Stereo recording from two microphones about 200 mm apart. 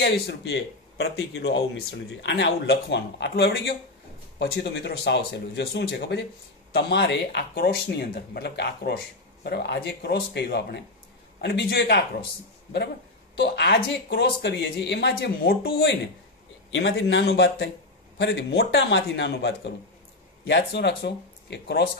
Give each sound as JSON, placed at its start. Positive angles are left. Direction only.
{"t": 0.0, "sound": "speech", "side_deg": 60}
{"t": 13.4, "sound": "speech", "side_deg": 55}